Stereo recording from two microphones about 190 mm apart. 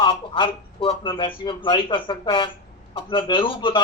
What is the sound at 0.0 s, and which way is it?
A man's voice, 25° left (ahead or behind).